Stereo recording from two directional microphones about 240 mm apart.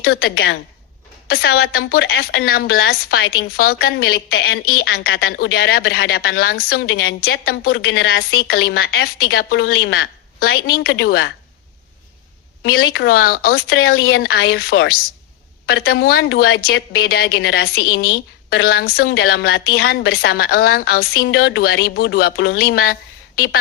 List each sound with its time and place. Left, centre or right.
0.0 s a woman's voice: left
12.6 s a woman's voice: left